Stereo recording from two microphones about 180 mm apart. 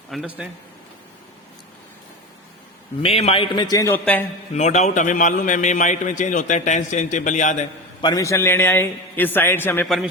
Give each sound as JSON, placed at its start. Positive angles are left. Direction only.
{"t": 0.1, "sound": "a man's voice", "side_deg": -5}
{"t": 3.0, "sound": "a man's voice", "side_deg": 30}
{"t": 4.5, "sound": "a man's voice", "side_deg": 40}
{"t": 8.0, "sound": "a man's voice", "side_deg": 20}